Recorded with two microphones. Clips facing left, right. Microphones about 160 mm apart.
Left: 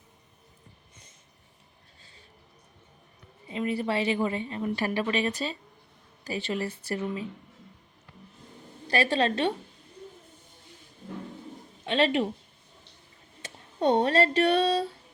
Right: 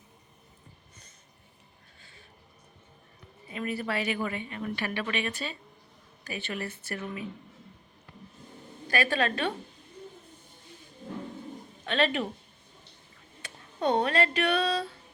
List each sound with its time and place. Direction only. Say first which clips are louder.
3.4 s a woman's voice: left 4 dB; 25° left (ahead or behind)
8.9 s a woman's voice: left 3 dB; 30° left (ahead or behind)
11.9 s a woman's voice: left 3 dB; 25° left (ahead or behind)
13.4 s speech: left 3 dB; 35° left (ahead or behind)